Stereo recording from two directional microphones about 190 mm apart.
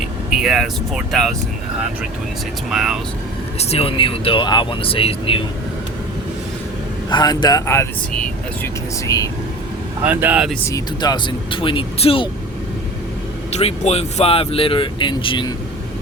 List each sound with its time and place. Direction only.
0.3 s speech: centre (ahead or behind)
2.6 s speech: centre (ahead or behind)
3.6 s speech: 30° left (ahead or behind)
7.1 s speech: 20° left (ahead or behind)
10.0 s speech: 10° right (ahead or behind)
10.7 s speech: 20° left (ahead or behind)
13.5 s speech: 35° left (ahead or behind)